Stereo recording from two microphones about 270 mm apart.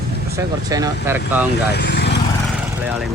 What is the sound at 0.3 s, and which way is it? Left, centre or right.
Speech, centre.